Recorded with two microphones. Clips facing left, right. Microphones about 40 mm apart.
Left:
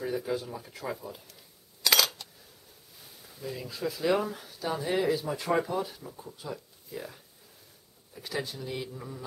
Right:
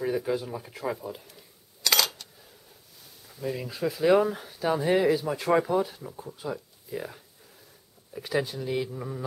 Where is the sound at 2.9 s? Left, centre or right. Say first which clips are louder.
Left 1 dB; centre.